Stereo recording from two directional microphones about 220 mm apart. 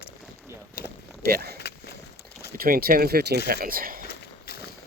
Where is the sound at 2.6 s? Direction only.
40° right (ahead or behind).